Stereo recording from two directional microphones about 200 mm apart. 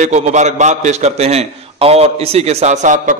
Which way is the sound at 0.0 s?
35° right (ahead or behind).